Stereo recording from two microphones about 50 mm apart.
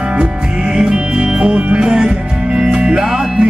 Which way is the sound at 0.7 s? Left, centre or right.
Centre.